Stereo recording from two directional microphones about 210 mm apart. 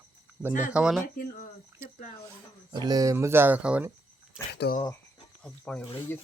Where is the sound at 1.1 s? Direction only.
40° left (ahead or behind).